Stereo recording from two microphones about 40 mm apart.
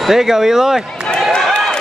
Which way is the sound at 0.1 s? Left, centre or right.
Centre.